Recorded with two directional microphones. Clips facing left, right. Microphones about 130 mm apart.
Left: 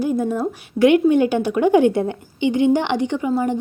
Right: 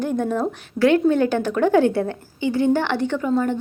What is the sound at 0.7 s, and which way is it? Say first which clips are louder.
A woman's voice: left 3 dB; 15° left (ahead or behind).